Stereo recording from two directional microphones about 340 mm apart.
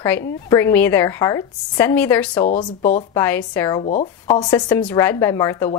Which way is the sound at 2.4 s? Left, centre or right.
Left.